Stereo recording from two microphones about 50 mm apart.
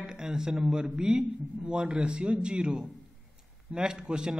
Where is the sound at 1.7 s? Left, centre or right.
Right.